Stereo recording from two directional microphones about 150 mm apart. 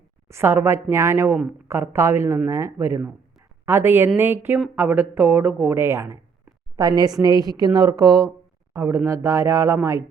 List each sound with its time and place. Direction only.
0.3 s speech: 15° right (ahead or behind)